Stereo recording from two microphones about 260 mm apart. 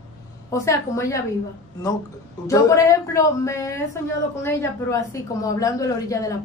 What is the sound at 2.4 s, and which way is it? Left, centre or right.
A man's voice, centre.